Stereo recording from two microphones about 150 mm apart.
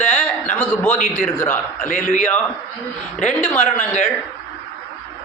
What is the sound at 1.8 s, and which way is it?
Speech, 65° left (ahead or behind).